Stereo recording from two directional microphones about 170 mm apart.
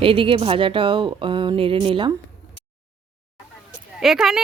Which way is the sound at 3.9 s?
Centre (ahead or behind).